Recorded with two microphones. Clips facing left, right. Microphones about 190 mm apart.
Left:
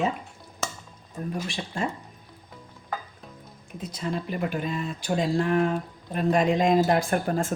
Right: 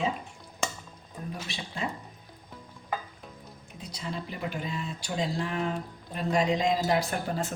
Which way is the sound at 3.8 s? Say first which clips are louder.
Left 6 dB; 50° left (ahead or behind).